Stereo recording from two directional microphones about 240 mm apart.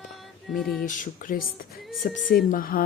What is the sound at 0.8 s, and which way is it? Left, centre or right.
Speech, left.